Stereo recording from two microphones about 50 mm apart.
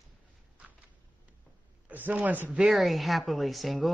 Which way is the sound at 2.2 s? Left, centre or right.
Right.